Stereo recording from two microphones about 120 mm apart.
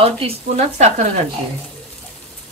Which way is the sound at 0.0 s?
60° right (ahead or behind).